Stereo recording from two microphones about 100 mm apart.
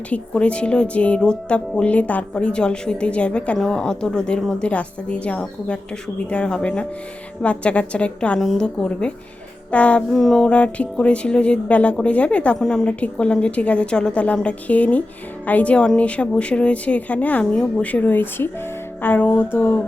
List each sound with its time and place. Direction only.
0.1 s speech: 10° left (ahead or behind)
19.5 s mantra: 20° left (ahead or behind)